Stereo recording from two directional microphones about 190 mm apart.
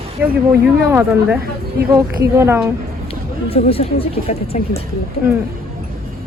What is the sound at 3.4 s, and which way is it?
Speech, 30° left (ahead or behind).